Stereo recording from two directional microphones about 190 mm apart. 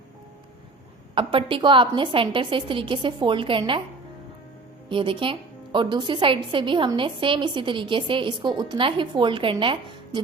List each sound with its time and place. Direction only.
1.1 s speech: 25° right (ahead or behind)
4.9 s speech: 25° right (ahead or behind)